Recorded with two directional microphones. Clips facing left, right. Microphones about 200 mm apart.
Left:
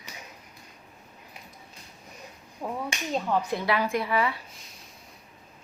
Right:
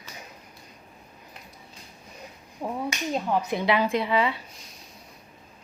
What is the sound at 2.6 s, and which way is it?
A woman's voice, 10° right (ahead or behind).